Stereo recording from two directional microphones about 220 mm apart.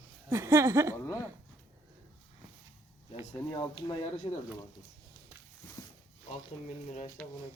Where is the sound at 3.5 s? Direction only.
20° left (ahead or behind).